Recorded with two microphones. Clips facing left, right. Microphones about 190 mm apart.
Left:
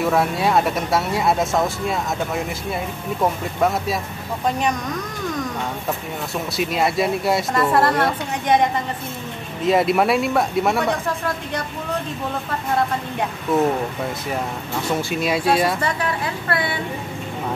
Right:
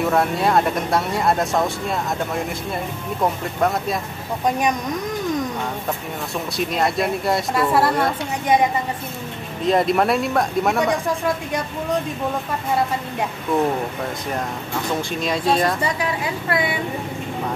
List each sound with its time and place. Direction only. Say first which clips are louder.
0.0 s speech: even; centre (ahead or behind)
6.5 s speech: left 1 dB; 5° left (ahead or behind)
9.7 s speech: left 1 dB; 5° left (ahead or behind)
15.0 s speech: left 2 dB; 5° left (ahead or behind)
15.8 s a woman's voice: even; 15° right (ahead or behind)